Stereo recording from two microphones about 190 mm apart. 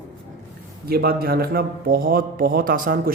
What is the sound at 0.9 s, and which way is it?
A man's voice, 55° right (ahead or behind).